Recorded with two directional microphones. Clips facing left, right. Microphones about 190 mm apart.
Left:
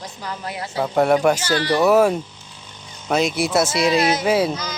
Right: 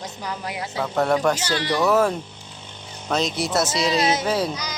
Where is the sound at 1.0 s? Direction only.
15° left (ahead or behind).